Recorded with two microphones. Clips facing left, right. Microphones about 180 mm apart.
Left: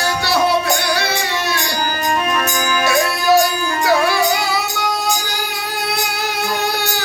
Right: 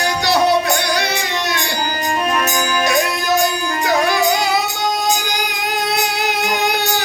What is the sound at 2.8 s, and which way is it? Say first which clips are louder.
Music: left 5 dB; 20° right (ahead or behind).